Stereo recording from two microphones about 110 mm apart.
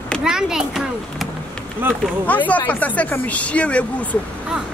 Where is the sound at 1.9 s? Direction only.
15° left (ahead or behind).